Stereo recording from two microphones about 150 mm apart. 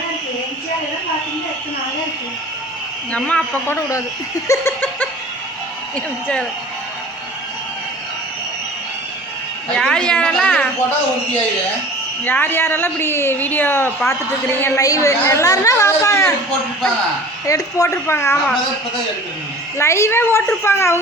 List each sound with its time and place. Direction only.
3.1 s a woman's voice: 10° left (ahead or behind)
3.8 s speech: 20° left (ahead or behind)
4.4 s laughter: 20° left (ahead or behind)
9.7 s a woman's voice: 5° left (ahead or behind)
12.2 s a woman's voice: 15° left (ahead or behind)
17.4 s a woman's voice: 20° left (ahead or behind)
19.8 s a woman's voice: 20° left (ahead or behind)